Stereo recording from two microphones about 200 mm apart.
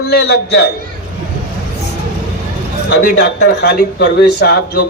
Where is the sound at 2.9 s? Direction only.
50° left (ahead or behind).